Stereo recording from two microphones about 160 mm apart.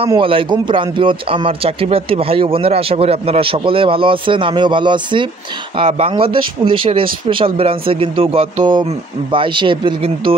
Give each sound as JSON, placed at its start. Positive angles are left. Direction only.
{"t": 0.1, "sound": "a man's voice", "side_deg": -35}